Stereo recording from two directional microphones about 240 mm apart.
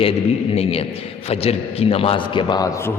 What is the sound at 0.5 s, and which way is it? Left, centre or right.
A man's voice, left.